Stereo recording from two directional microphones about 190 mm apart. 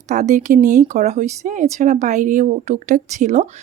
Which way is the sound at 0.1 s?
40° right (ahead or behind).